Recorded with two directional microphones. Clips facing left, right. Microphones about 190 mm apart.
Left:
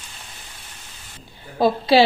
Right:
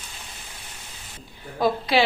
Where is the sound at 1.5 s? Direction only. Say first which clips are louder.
Left 5 dB; 30° left (ahead or behind).